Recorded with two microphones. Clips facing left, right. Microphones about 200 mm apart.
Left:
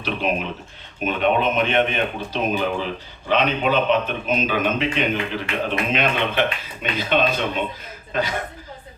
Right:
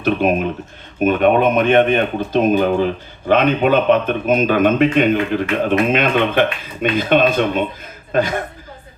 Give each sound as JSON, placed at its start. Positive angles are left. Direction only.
{"t": 0.0, "sound": "a man's voice", "side_deg": -50}